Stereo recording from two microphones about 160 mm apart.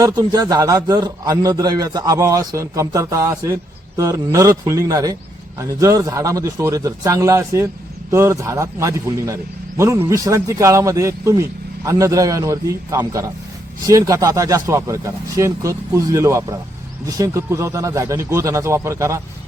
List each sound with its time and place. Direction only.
0.0 s a man's voice: 25° right (ahead or behind)